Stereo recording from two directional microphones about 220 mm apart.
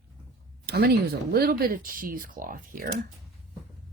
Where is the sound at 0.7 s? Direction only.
45° right (ahead or behind).